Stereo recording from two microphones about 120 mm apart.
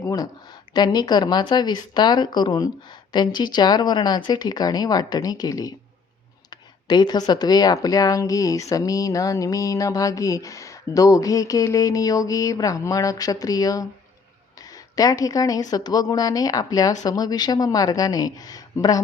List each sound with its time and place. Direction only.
0.0 s speech: 25° left (ahead or behind)
14.9 s speech: 30° left (ahead or behind)